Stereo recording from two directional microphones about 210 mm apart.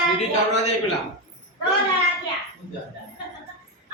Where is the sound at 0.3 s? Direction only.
35° left (ahead or behind).